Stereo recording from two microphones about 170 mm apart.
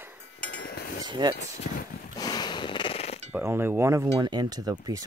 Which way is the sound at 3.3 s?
15° right (ahead or behind).